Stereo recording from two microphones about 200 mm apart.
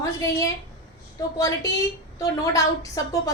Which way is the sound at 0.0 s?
15° left (ahead or behind).